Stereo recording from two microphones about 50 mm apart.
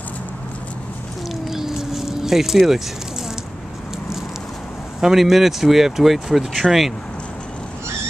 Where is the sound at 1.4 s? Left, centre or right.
Centre.